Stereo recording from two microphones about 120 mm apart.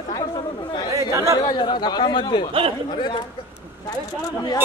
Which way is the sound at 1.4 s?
40° left (ahead or behind).